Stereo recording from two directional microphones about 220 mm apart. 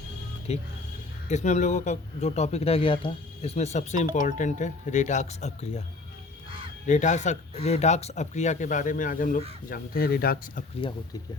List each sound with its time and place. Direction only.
0.5 s speech: 30° left (ahead or behind)
6.8 s speech: 35° left (ahead or behind)